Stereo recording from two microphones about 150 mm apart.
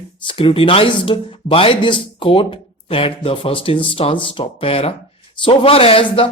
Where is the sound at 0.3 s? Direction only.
35° left (ahead or behind).